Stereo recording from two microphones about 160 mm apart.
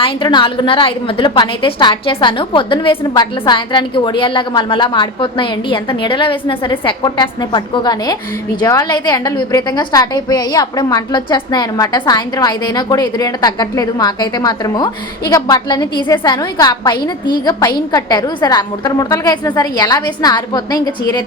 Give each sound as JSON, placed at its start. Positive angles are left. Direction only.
{"t": 0.0, "sound": "a woman's voice", "side_deg": 30}